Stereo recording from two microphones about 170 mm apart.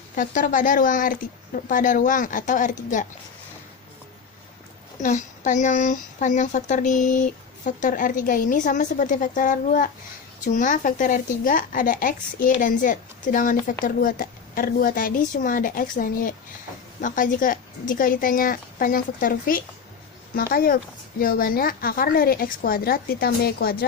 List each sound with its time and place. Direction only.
0.2 s speech: 50° left (ahead or behind)
5.0 s a woman's voice: 45° left (ahead or behind); by 23.8 s 65° left (ahead or behind)